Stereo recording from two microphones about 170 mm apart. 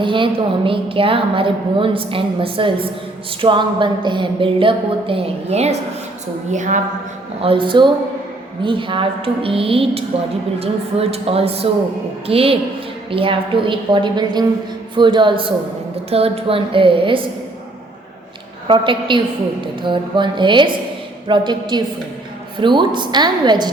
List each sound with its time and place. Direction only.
0.0 s a woman's voice: 30° right (ahead or behind); by 6.8 s 45° right (ahead or behind)
7.4 s a woman's voice: 30° right (ahead or behind)
18.7 s a woman's voice: 30° right (ahead or behind)